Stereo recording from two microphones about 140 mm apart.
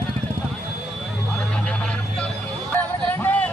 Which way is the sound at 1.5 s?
5° left (ahead or behind).